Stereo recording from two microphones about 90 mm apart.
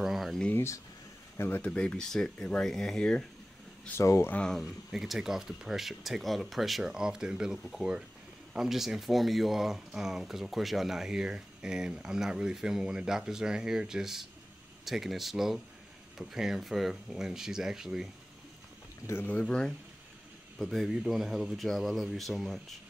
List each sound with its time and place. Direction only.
0.0 s a sound: centre (ahead or behind)
0.5 s speech: 25° left (ahead or behind)
1.7 s speech: 10° left (ahead or behind)
3.9 s speech: 35° left (ahead or behind)
4.3 s speech: 10° left (ahead or behind)
19.1 s speech: 35° left (ahead or behind)
19.4 s speech: 5° left (ahead or behind)